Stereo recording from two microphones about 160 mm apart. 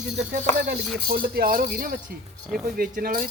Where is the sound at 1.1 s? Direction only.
70° right (ahead or behind).